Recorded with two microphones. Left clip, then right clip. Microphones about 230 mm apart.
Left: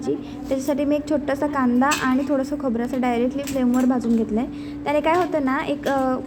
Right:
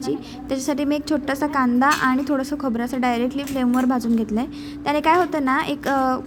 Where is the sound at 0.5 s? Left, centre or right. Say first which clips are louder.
Left 1 dB; right.